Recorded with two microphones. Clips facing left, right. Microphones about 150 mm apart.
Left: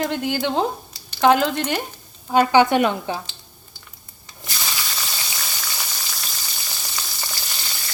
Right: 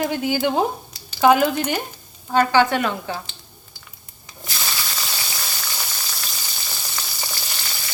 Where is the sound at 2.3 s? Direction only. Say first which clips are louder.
Left 2 dB; 15° left (ahead or behind).